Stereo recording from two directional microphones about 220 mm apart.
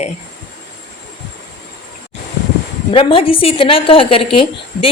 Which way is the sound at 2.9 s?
25° left (ahead or behind).